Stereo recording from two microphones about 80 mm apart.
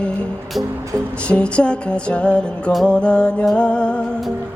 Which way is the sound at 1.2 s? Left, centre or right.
Centre.